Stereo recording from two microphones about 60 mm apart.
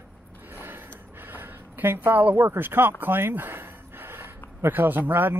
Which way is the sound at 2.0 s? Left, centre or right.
Right.